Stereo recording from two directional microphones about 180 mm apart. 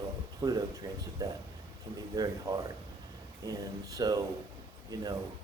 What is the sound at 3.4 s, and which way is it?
A man's voice, 20° right (ahead or behind).